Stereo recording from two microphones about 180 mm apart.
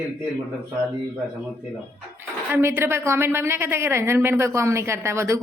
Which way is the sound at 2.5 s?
10° right (ahead or behind).